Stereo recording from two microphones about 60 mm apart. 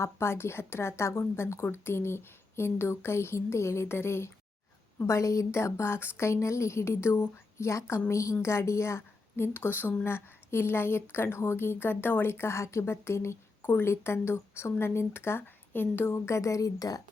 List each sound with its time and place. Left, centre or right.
0.0 s a woman's voice: left
6.1 s a woman's voice: left
13.7 s a woman's voice: left